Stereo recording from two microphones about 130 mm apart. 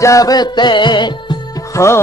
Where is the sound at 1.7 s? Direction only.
25° left (ahead or behind).